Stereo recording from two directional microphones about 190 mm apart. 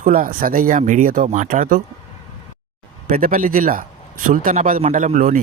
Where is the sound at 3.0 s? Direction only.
45° right (ahead or behind).